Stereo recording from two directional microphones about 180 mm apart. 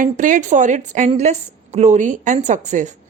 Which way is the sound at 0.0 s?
45° right (ahead or behind).